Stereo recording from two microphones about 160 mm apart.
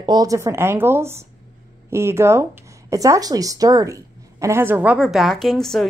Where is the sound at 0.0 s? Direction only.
25° right (ahead or behind).